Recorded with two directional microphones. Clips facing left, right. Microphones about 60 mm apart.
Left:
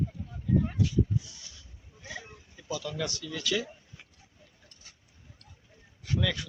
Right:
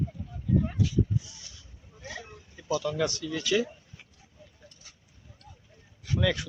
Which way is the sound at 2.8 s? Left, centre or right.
Right.